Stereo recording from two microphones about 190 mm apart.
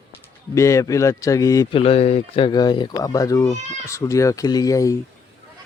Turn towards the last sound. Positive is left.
turn(degrees=15)  # may be behind; listen again after turning